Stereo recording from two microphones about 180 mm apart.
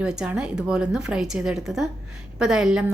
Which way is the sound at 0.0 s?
5° right (ahead or behind).